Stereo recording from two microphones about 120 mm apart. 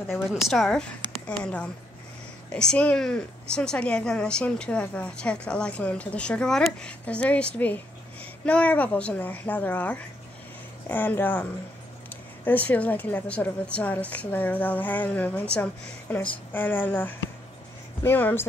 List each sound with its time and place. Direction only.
0.5 s a woman's voice: 5° left (ahead or behind)